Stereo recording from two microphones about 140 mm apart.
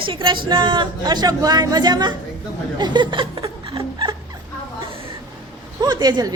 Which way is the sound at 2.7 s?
30° right (ahead or behind).